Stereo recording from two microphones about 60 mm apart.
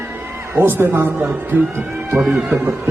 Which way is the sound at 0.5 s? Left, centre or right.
Right.